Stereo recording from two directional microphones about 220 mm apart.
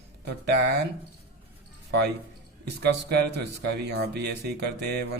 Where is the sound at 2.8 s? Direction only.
50° right (ahead or behind).